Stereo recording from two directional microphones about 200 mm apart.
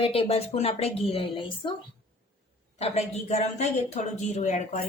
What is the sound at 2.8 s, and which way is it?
A woman's voice, 30° left (ahead or behind).